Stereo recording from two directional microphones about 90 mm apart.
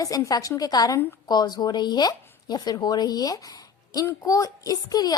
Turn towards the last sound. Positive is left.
turn(degrees=45)  # may be behind; listen again after turning